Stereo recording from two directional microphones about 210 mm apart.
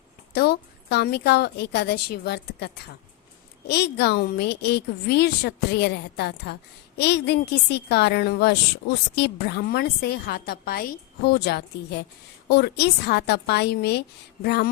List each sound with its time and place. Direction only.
0.3 s a woman's voice: 50° left (ahead or behind)